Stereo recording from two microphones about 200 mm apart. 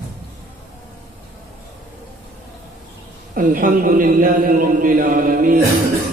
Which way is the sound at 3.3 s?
40° right (ahead or behind).